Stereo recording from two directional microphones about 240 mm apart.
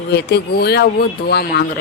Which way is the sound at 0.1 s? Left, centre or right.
Left.